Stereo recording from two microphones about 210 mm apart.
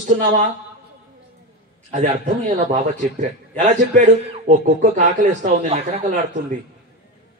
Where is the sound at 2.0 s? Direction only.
35° right (ahead or behind).